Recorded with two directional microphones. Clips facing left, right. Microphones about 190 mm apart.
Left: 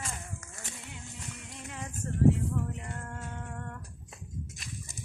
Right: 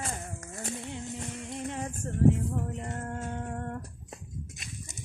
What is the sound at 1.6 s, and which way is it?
Female singing, 35° right (ahead or behind).